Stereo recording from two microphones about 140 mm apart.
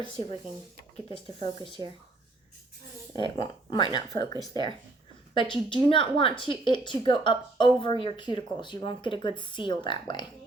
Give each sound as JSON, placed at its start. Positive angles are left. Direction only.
{"t": 1.1, "sound": "speech", "side_deg": 35}
{"t": 3.1, "sound": "speech", "side_deg": 35}